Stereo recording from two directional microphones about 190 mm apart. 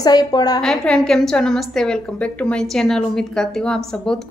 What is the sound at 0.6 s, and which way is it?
A woman's voice, 5° left (ahead or behind).